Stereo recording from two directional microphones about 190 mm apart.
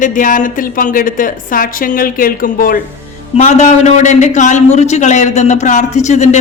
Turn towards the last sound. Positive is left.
turn(degrees=40)  # may be behind; listen again after turning